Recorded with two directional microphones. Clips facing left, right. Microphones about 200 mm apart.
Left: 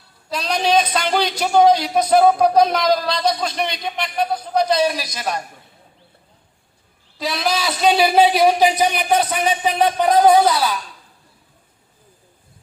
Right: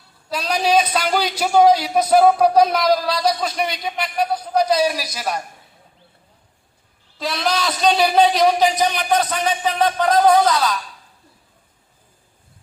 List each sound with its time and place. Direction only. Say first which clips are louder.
0.3 s a man's voice: even; 10° right (ahead or behind)
7.2 s speech: even; centre (ahead or behind)